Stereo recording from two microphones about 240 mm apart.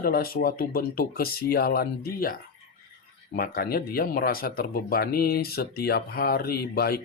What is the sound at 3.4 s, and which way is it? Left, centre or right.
Speech, left.